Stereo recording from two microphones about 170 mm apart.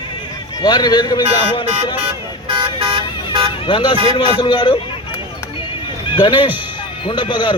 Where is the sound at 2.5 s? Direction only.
30° right (ahead or behind).